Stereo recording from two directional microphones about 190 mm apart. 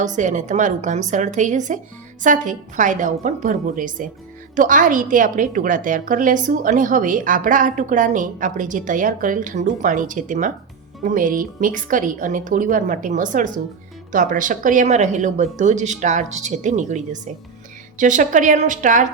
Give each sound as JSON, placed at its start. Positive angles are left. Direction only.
{"t": 0.0, "sound": "a woman's voice", "side_deg": -40}